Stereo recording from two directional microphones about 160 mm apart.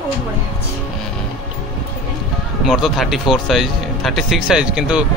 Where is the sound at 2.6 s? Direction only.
Centre (ahead or behind).